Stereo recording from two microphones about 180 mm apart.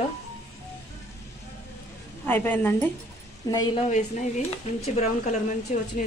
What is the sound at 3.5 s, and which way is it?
Speech, 20° left (ahead or behind).